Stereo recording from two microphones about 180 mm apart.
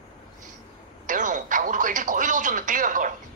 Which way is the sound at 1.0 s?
45° right (ahead or behind).